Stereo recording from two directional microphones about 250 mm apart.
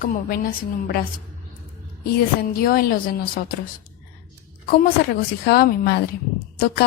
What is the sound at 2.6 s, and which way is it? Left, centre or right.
Speech, left.